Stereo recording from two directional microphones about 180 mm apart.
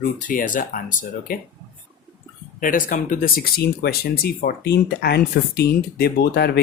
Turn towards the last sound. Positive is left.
turn(degrees=60)  # may be behind; listen again after turning